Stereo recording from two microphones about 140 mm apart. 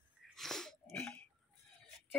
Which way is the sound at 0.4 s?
5° left (ahead or behind).